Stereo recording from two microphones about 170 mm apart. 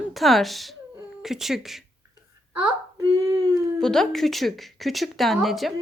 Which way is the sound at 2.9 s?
20° right (ahead or behind).